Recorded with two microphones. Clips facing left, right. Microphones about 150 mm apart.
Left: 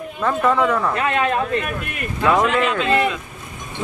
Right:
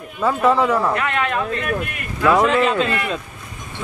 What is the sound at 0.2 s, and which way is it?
Speech, 5° right (ahead or behind).